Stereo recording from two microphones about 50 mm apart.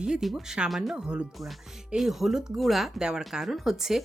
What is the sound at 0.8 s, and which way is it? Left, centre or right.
Speech, centre.